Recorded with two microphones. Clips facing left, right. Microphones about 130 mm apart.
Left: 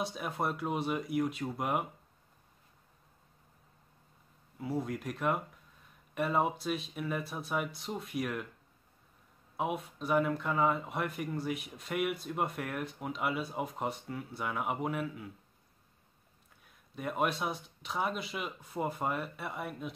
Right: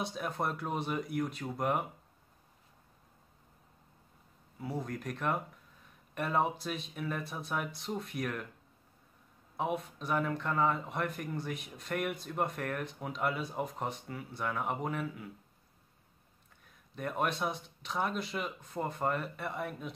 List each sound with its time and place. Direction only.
0.0 s speech: centre (ahead or behind)
4.6 s speech: centre (ahead or behind)
9.6 s speech: centre (ahead or behind)
16.6 s speech: 5° left (ahead or behind)